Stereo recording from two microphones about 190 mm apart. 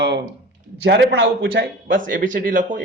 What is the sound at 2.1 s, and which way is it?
Speech, 45° right (ahead or behind).